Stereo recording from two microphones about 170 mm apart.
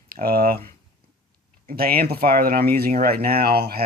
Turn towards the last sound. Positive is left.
turn(degrees=-60)  # may be behind; listen again after turning